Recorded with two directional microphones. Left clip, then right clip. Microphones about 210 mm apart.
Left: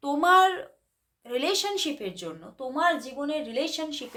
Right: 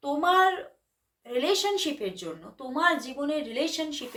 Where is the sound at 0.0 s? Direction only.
40° left (ahead or behind).